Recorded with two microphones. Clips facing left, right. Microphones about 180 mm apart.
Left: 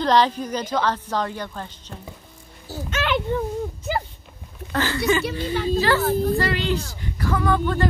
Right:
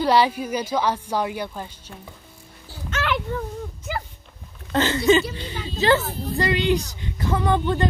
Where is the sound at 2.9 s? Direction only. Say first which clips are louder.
Left 1 dB; 20° left (ahead or behind).